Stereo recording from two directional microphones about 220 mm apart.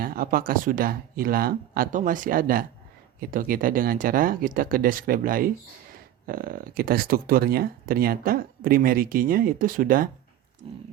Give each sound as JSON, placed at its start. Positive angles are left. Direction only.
{"t": 0.0, "sound": "speech", "side_deg": -40}